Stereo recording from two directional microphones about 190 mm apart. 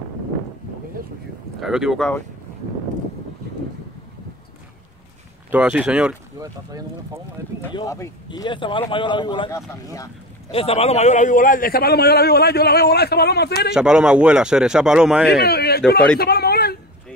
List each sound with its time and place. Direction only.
1.6 s speech: 5° right (ahead or behind)
5.5 s speech: 5° right (ahead or behind)
6.4 s speech: 20° right (ahead or behind)
7.7 s a man's voice: 15° left (ahead or behind); by 13.7 s 55° left (ahead or behind)
13.7 s speech: 5° right (ahead or behind)
15.2 s a man's voice: 55° left (ahead or behind)
16.2 s a sound: 55° left (ahead or behind)